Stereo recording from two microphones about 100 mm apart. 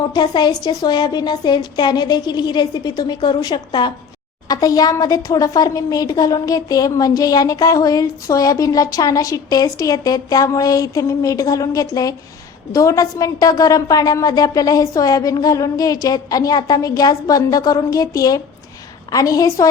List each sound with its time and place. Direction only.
0.1 s a woman's voice: 45° left (ahead or behind)
4.4 s a woman's voice: 35° left (ahead or behind)